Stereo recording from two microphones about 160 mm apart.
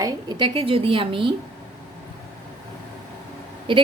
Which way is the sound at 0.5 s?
35° right (ahead or behind).